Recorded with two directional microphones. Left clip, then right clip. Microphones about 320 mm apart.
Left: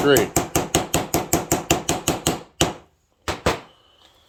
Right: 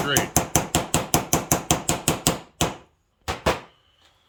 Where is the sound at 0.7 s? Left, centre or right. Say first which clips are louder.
Left 2 dB; centre.